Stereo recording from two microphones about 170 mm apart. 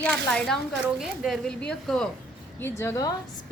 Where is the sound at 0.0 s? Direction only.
5° left (ahead or behind).